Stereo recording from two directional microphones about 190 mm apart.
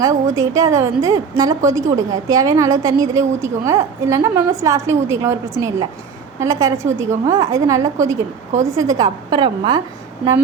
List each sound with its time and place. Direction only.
0.0 s a woman's voice: 15° right (ahead or behind)